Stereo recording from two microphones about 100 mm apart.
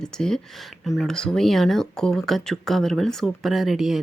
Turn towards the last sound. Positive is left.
turn(degrees=0)  # may be behind; listen again after turning